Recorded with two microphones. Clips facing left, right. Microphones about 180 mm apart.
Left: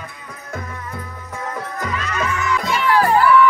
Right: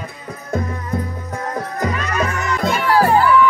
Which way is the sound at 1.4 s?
40° right (ahead or behind).